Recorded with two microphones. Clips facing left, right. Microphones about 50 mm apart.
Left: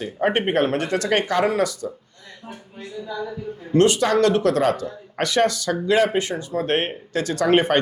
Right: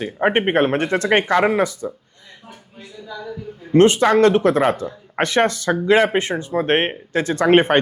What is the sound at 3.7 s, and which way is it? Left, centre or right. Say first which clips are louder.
Speech: right 4 dB; right.